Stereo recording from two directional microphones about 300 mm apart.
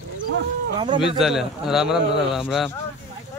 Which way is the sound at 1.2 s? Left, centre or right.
Centre.